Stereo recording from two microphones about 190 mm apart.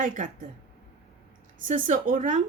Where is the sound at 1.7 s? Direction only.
45° right (ahead or behind).